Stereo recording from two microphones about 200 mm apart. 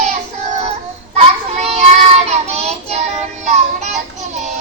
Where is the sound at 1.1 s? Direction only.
35° right (ahead or behind).